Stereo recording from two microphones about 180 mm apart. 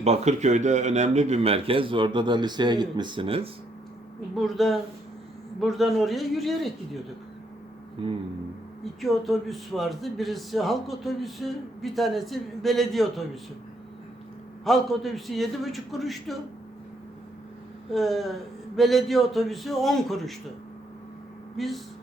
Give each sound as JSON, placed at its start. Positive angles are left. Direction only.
{"t": 0.0, "sound": "a man's voice", "side_deg": -40}
{"t": 4.4, "sound": "a man's voice", "side_deg": 0}
{"t": 8.8, "sound": "a man's voice", "side_deg": 0}
{"t": 14.6, "sound": "a man's voice", "side_deg": 0}
{"t": 17.9, "sound": "a man's voice", "side_deg": 0}
{"t": 21.5, "sound": "speech", "side_deg": 0}